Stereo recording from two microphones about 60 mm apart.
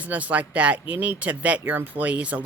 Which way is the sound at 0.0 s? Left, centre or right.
Right.